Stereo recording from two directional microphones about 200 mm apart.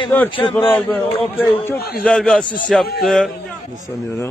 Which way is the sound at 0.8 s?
10° left (ahead or behind).